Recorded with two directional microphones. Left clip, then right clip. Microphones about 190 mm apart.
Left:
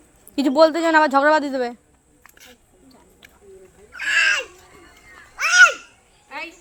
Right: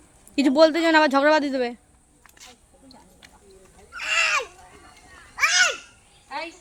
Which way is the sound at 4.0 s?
15° right (ahead or behind).